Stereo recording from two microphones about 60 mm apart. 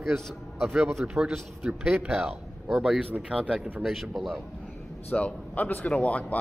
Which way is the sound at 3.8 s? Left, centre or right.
Centre.